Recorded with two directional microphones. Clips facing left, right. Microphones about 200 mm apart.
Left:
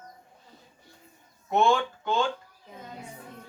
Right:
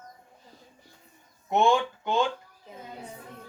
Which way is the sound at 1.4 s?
20° right (ahead or behind).